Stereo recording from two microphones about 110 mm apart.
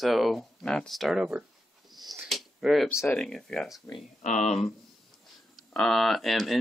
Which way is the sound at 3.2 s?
5° left (ahead or behind).